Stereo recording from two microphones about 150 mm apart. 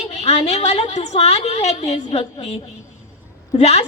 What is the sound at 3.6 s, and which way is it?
Speech, 45° left (ahead or behind).